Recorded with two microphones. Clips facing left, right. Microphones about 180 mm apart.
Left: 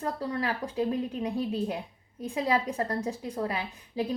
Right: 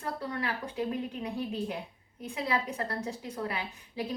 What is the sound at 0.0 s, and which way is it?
A woman's voice, 35° left (ahead or behind).